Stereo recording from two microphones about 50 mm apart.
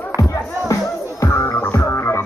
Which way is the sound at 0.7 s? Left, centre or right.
Left.